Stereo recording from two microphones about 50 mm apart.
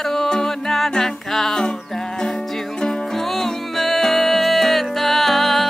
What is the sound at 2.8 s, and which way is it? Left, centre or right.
Music, centre.